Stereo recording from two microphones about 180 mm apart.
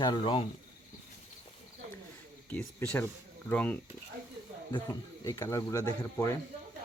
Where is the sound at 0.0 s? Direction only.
25° left (ahead or behind).